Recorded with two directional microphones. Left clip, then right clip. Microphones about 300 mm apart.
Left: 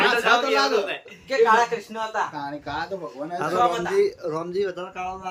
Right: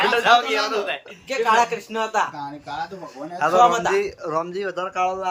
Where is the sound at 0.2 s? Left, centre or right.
Right.